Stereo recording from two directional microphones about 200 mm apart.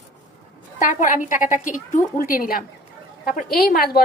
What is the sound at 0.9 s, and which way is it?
A woman's voice, 40° left (ahead or behind).